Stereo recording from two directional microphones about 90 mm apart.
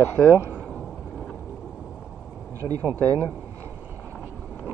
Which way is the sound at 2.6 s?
40° right (ahead or behind).